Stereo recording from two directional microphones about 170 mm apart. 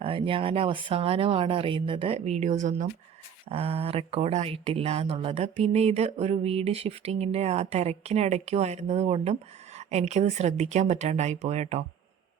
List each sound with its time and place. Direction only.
0.0 s speech: 30° right (ahead or behind)